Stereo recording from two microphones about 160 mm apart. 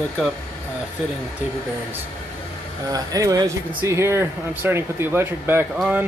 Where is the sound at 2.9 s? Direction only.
20° right (ahead or behind).